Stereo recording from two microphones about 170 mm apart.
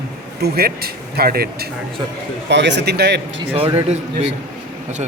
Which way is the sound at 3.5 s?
30° right (ahead or behind).